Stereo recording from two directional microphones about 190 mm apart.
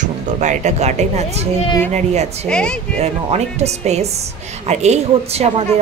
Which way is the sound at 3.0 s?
35° right (ahead or behind).